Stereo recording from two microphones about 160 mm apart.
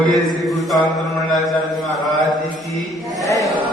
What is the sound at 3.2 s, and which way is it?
Speech, 20° left (ahead or behind).